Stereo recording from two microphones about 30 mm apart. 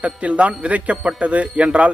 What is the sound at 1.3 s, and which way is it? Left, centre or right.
Speech, right.